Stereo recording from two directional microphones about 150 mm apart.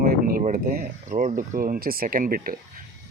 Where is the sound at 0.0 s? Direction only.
85° right.